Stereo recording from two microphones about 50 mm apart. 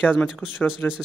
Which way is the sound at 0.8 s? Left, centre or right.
Left.